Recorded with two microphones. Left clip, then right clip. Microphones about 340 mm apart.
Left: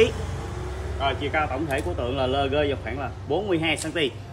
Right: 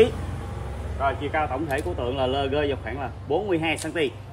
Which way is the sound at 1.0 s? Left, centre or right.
Centre.